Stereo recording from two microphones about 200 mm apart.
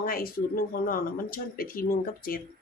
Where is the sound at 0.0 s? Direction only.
45° left (ahead or behind).